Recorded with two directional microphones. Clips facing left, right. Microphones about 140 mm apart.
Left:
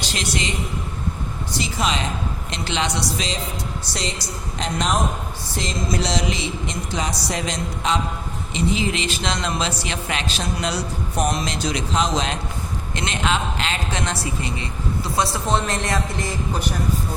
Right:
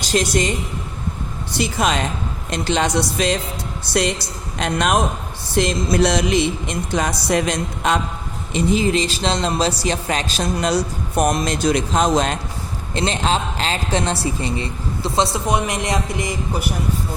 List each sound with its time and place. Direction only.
0.0 s a woman's voice: 45° right (ahead or behind)
1.6 s speech: 50° right (ahead or behind)
4.6 s music: 60° right (ahead or behind)
8.5 s a man's voice: 45° right (ahead or behind)
12.9 s a man's voice: 35° right (ahead or behind)
15.4 s speech: 15° right (ahead or behind)